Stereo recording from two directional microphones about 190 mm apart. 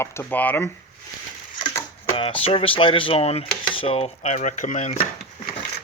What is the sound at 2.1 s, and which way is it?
Speech, 30° left (ahead or behind).